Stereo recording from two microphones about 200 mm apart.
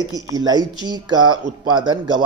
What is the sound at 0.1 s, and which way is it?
Speech, 20° right (ahead or behind).